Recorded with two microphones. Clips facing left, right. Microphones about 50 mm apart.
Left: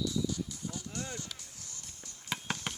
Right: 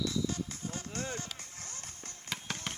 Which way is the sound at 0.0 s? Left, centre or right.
Right.